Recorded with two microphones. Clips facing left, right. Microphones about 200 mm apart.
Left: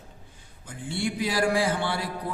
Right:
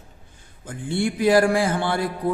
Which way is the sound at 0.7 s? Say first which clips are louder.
Right 6 dB; 50° right (ahead or behind).